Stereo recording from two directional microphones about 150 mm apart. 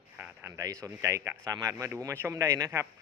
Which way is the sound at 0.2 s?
15° right (ahead or behind).